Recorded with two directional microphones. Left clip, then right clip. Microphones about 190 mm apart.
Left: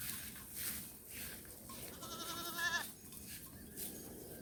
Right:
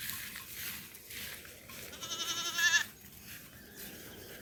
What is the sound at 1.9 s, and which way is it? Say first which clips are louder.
Goat: right 9 dB; 30° left (ahead or behind).